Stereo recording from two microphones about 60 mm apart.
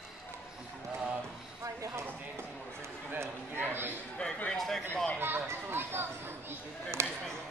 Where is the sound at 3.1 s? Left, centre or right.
Right.